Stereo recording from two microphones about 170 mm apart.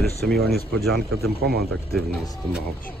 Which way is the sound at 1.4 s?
65° right (ahead or behind).